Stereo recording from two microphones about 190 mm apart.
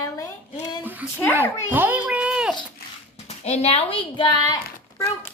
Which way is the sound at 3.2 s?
30° left (ahead or behind).